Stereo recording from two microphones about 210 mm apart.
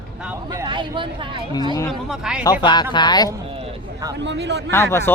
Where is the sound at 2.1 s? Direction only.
5° right (ahead or behind).